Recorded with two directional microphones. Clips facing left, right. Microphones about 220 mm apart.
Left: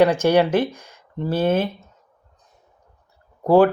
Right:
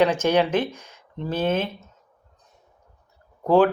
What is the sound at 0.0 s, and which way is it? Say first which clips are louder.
Speech: left 3 dB; 15° left (ahead or behind).